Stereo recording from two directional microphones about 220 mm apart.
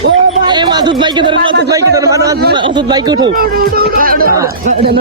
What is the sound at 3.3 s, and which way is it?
Speech, 40° right (ahead or behind).